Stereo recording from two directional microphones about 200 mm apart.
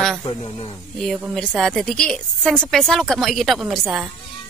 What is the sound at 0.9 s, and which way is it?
A woman's voice, centre (ahead or behind).